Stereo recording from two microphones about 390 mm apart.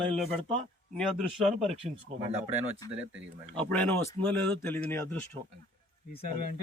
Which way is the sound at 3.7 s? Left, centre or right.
Centre.